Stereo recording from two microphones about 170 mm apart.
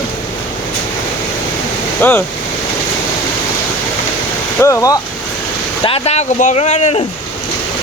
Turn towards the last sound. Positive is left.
turn(degrees=40)  # may be behind; listen again after turning